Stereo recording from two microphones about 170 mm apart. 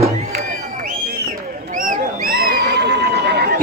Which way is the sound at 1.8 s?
55° right (ahead or behind).